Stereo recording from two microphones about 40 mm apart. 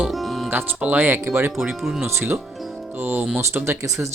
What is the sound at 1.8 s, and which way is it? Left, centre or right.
Speech, centre.